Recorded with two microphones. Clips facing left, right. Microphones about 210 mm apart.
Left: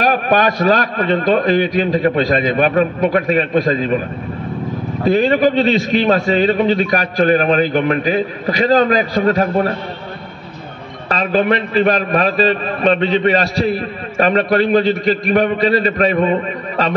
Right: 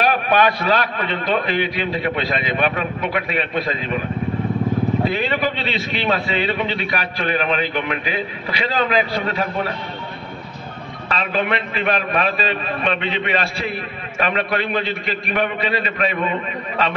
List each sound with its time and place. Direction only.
0.0 s a man's voice: 45° left (ahead or behind)
5.0 s a man's voice: 45° left (ahead or behind)
11.1 s a man's voice: 40° left (ahead or behind)